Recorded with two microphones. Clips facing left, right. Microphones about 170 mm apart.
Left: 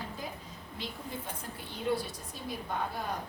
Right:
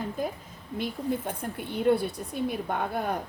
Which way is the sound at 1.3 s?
60° right (ahead or behind).